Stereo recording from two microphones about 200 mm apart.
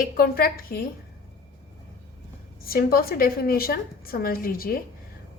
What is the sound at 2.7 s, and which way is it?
A woman's voice, 50° left (ahead or behind).